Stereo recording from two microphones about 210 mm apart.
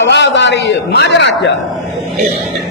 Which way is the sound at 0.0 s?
55° left (ahead or behind).